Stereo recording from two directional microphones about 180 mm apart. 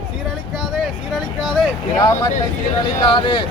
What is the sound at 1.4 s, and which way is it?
Speech, centre (ahead or behind).